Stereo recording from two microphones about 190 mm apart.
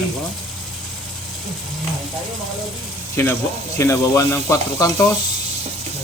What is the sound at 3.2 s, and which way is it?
Sizzle, 15° left (ahead or behind).